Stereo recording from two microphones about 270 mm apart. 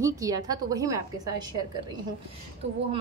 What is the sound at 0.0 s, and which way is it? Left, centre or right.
A woman's voice, centre.